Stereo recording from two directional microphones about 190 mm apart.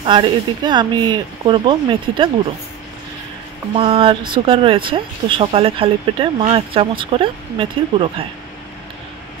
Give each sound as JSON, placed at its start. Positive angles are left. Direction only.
{"t": 0.0, "sound": "speech", "side_deg": -25}
{"t": 3.7, "sound": "speech", "side_deg": -30}